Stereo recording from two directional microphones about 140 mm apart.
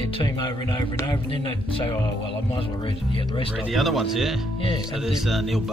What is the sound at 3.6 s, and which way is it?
Speech, centre (ahead or behind).